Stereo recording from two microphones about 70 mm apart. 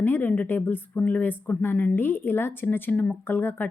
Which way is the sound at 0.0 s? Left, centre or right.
Left.